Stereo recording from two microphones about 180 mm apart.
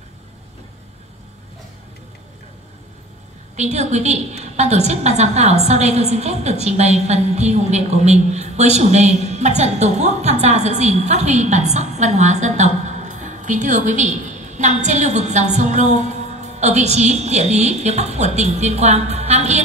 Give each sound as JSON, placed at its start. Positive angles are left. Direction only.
{"t": 3.5, "sound": "a woman's voice", "side_deg": -40}